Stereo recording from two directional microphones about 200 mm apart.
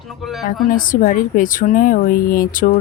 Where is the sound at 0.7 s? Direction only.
45° left (ahead or behind).